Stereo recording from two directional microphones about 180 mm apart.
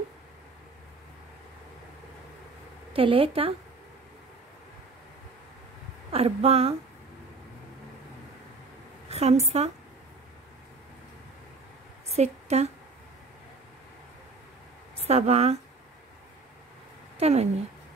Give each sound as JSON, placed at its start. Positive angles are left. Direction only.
{"t": 2.9, "sound": "a woman's voice", "side_deg": -30}
{"t": 6.1, "sound": "a woman's voice", "side_deg": -35}
{"t": 9.1, "sound": "a woman's voice", "side_deg": -35}
{"t": 12.1, "sound": "a woman's voice", "side_deg": -35}
{"t": 15.0, "sound": "speech", "side_deg": -35}
{"t": 17.2, "sound": "a woman's voice", "side_deg": -35}